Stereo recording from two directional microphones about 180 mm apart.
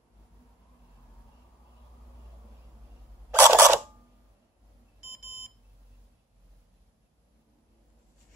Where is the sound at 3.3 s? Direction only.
10° right (ahead or behind).